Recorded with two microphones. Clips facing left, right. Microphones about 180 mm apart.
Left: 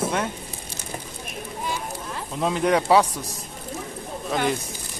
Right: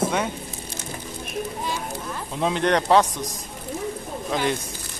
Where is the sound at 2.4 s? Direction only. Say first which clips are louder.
Even; 5° left (ahead or behind).